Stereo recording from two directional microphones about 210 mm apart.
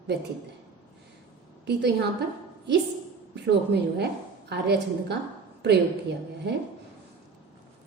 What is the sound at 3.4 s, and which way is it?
A woman's voice, 50° right (ahead or behind).